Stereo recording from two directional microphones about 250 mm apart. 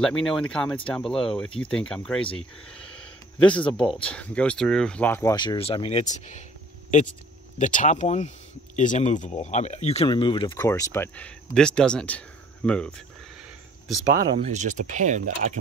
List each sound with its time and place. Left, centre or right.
0.0 s speech: centre; by 6.4 s left
7.5 s speech: left; by 13.0 s centre
14.5 s speech: right